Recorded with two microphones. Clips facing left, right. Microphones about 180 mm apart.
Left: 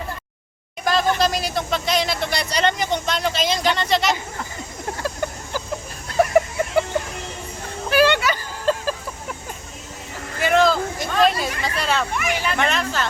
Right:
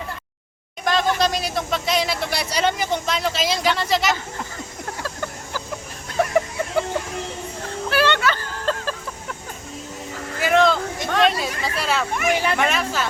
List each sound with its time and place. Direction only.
0.9 s speech: 5° left (ahead or behind)
5.0 s vehicle: 15° left (ahead or behind)
7.9 s a sound: 15° left (ahead or behind)
10.4 s a sound: centre (ahead or behind)
12.1 s speech: 50° right (ahead or behind)
12.5 s speech: 5° right (ahead or behind)